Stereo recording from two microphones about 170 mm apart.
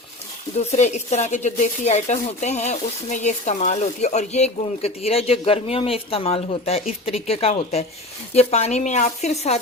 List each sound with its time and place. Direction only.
0.7 s speech: 40° left (ahead or behind)